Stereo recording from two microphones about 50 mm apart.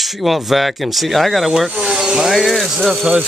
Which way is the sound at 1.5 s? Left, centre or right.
Centre.